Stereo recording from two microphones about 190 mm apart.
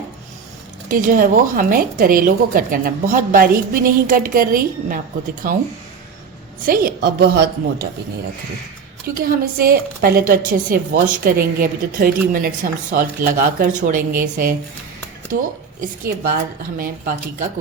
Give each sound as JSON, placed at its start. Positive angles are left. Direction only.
{"t": 0.9, "sound": "speech", "side_deg": -45}
{"t": 6.7, "sound": "speech", "side_deg": -50}
{"t": 9.1, "sound": "speech", "side_deg": -50}
{"t": 16.0, "sound": "speech", "side_deg": -50}